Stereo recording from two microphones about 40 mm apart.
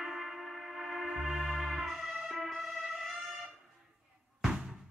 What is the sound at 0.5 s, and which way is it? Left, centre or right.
Music, centre.